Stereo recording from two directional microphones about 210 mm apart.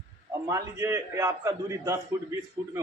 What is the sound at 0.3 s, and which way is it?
Speech, 15° right (ahead or behind).